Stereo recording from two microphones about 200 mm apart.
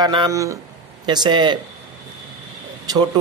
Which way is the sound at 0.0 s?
20° right (ahead or behind).